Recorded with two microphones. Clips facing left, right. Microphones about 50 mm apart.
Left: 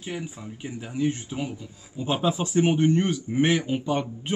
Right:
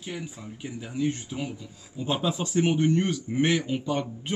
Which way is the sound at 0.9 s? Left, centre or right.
Centre.